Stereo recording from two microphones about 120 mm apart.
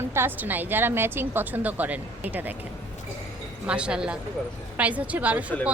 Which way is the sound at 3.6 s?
10° right (ahead or behind).